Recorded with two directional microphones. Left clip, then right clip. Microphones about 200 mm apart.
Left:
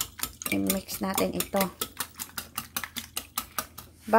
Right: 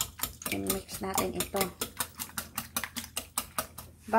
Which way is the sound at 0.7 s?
55° left (ahead or behind).